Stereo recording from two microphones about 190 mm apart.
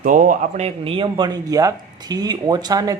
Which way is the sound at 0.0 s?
45° right (ahead or behind).